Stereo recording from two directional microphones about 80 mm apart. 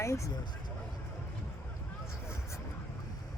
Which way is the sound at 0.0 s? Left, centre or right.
Left.